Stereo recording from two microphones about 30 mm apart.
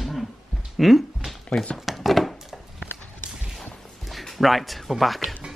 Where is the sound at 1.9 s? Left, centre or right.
Centre.